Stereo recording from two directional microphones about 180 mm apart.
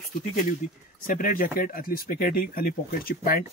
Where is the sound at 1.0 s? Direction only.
50° left (ahead or behind).